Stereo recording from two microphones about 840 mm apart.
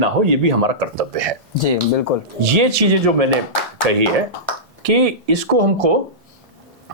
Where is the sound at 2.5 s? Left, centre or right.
Right.